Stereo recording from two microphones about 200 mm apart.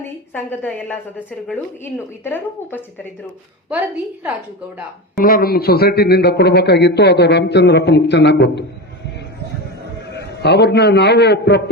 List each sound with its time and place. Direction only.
0.3 s speech: 10° left (ahead or behind)
3.7 s a woman's voice: 5° right (ahead or behind)
5.2 s a man's voice: 50° left (ahead or behind)
10.2 s a man's voice: 60° left (ahead or behind)